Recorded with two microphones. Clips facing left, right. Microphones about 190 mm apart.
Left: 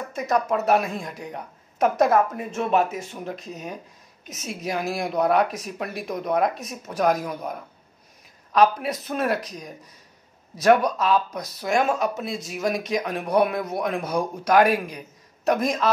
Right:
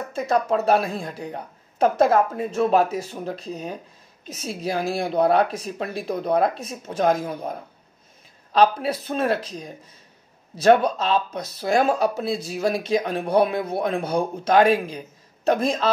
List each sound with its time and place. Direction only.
0.1 s speech: 30° right (ahead or behind)